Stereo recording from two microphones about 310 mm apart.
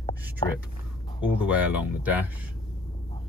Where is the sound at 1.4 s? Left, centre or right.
Centre.